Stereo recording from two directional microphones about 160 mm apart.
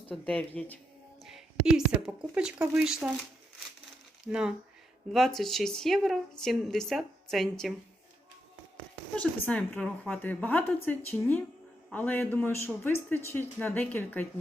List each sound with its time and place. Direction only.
0.1 s speech: 10° left (ahead or behind)
1.2 s a woman's voice: 5° right (ahead or behind)
4.3 s a woman's voice: 5° right (ahead or behind)
9.1 s speech: 10° left (ahead or behind)